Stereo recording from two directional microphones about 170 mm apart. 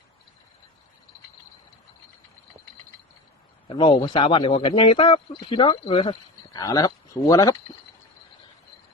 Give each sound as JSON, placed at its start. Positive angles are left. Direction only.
{"t": 3.7, "sound": "speech", "side_deg": 30}